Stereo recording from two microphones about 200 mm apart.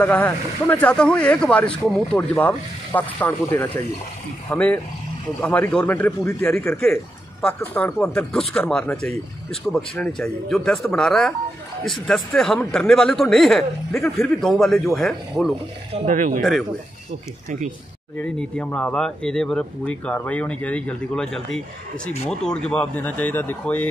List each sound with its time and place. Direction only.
0.0 s speech: 10° left (ahead or behind)
16.1 s speech: 40° right (ahead or behind)
18.1 s speech: 5° left (ahead or behind)